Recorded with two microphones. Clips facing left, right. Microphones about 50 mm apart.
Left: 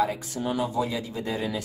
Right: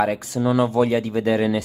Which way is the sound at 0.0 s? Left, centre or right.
Right.